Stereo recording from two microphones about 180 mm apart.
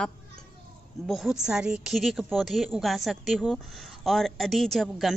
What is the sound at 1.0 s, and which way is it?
Speech, centre (ahead or behind).